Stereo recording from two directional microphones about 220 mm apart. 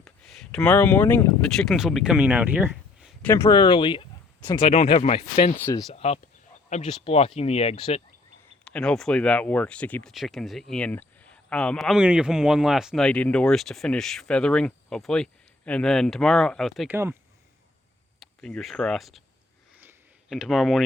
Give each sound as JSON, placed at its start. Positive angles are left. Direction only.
{"t": 0.0, "sound": "speech", "side_deg": 0}
{"t": 3.2, "sound": "speech", "side_deg": 10}
{"t": 8.6, "sound": "speech", "side_deg": 5}
{"t": 18.2, "sound": "speech", "side_deg": 5}
{"t": 20.3, "sound": "speech", "side_deg": 0}